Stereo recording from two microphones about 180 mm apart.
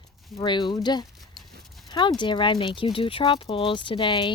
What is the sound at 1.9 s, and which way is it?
Speech, 25° left (ahead or behind).